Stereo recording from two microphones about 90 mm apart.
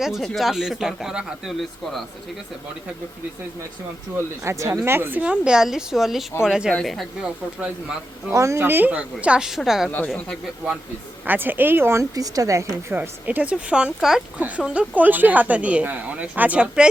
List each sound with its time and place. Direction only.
0.0 s speech: 5° right (ahead or behind)
4.4 s a woman's voice: 30° right (ahead or behind); by 6.7 s 10° right (ahead or behind)
6.7 s speech: 5° left (ahead or behind)
8.3 s speech: 35° right (ahead or behind); by 9.9 s 5° right (ahead or behind)
11.3 s speech: 20° right (ahead or behind)
12.1 s a woman's voice: 40° right (ahead or behind)
12.9 s speech: 20° right (ahead or behind)